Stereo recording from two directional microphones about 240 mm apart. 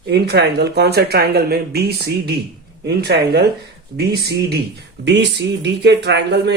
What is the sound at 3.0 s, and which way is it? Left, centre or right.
Speech, right.